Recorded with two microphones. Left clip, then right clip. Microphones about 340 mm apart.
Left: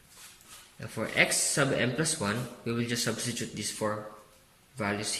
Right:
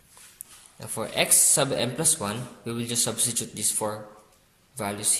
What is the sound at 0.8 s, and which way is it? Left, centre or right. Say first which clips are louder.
Speech: even; centre.